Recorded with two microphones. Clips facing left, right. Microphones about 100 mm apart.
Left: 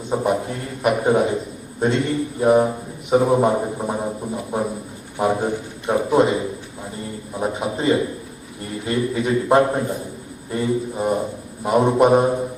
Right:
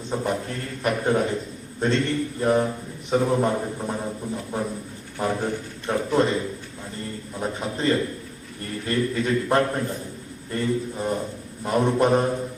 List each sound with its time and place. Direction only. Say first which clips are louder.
0.1 s a man's voice: left 6 dB; 15° left (ahead or behind)